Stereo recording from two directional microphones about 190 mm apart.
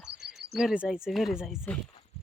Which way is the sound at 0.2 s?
60° right (ahead or behind).